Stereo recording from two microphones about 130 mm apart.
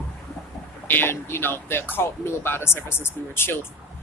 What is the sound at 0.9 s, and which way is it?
Speech, 15° left (ahead or behind).